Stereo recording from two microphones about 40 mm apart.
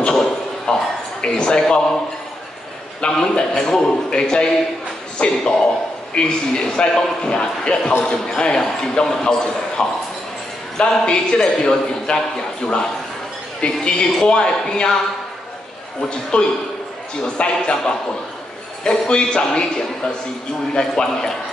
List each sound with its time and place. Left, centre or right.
0.7 s a sound: left
1.2 s speech: left
3.0 s a man's voice: centre
13.6 s a man's voice: left
16.0 s a man's voice: left